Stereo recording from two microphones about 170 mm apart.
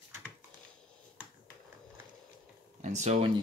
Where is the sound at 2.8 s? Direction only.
45° right (ahead or behind).